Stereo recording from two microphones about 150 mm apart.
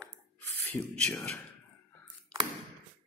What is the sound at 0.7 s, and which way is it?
Speech, 10° left (ahead or behind).